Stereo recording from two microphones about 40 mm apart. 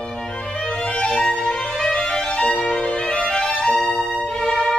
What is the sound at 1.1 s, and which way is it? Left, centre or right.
Music, centre.